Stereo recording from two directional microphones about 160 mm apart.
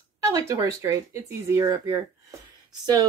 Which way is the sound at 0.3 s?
20° right (ahead or behind).